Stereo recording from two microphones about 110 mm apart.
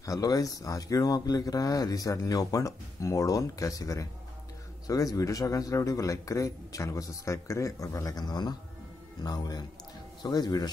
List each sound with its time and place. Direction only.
0.0 s speech: 30° left (ahead or behind)